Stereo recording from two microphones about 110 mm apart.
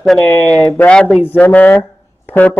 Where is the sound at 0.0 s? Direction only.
Centre (ahead or behind).